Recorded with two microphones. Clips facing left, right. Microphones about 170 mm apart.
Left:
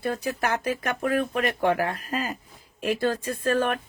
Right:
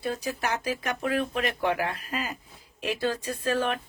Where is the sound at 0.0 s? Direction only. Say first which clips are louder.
Left 3 dB; 55° left (ahead or behind).